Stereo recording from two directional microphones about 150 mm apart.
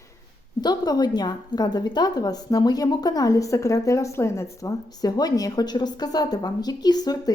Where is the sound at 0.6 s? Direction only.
25° left (ahead or behind).